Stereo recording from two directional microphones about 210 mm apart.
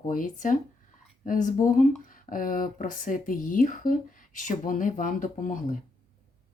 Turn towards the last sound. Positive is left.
turn(degrees=40)  # may be behind; listen again after turning